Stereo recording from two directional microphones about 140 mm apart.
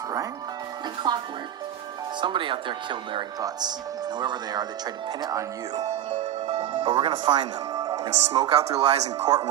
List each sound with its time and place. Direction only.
1.0 s speech: 30° right (ahead or behind)
2.2 s speech: 35° right (ahead or behind)
5.8 s music: 50° right (ahead or behind)
6.9 s speech: 35° right (ahead or behind)
8.6 s speech: 50° right (ahead or behind)